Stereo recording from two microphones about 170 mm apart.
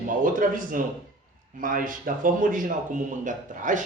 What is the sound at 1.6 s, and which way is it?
Speech, 55° right (ahead or behind).